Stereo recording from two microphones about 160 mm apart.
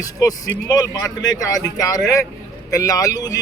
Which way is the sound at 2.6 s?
20° left (ahead or behind).